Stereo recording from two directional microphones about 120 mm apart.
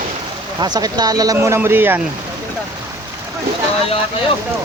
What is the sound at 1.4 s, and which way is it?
Speech, 20° right (ahead or behind).